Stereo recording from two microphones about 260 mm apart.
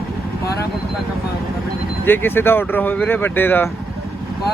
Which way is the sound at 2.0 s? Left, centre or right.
Centre.